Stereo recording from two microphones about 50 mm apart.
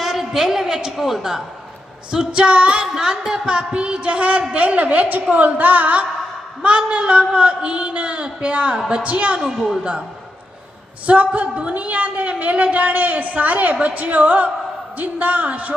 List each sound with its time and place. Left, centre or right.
0.0 s a woman's voice: centre
2.3 s a man's voice: right
2.8 s a woman's voice: centre
11.0 s a woman's voice: right